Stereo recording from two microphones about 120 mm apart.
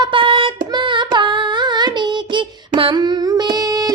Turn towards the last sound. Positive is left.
turn(degrees=-30)  # may be behind; listen again after turning